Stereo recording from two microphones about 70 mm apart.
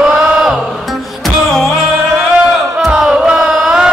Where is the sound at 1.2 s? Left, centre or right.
Centre.